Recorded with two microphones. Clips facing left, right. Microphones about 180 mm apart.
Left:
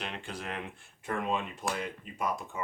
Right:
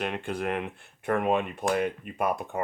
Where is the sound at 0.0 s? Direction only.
55° right (ahead or behind).